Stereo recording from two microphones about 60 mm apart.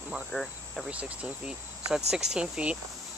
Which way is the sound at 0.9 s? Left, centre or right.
Right.